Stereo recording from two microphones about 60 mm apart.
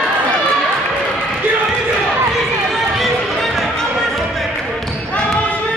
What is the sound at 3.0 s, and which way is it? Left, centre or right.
Run, centre.